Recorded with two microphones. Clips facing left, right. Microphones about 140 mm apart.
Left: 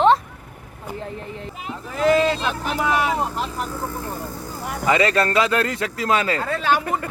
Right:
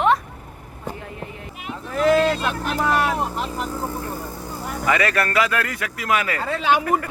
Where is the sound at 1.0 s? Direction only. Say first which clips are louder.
Left 3 dB; 30° left (ahead or behind).